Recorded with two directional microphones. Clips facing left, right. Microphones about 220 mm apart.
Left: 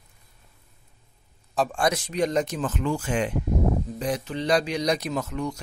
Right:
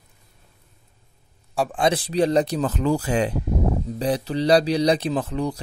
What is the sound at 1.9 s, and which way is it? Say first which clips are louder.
Speech: right 5 dB; 35° right (ahead or behind).